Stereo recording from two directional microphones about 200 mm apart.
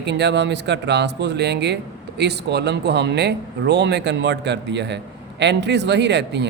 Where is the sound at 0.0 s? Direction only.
60° right (ahead or behind).